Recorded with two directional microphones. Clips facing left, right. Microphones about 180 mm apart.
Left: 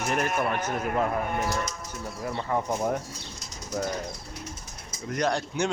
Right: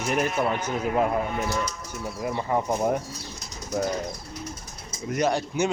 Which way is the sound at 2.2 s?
15° right (ahead or behind).